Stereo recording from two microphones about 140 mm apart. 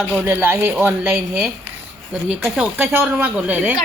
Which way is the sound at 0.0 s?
15° right (ahead or behind).